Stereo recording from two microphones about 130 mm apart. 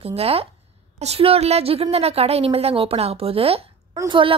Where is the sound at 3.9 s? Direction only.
35° right (ahead or behind).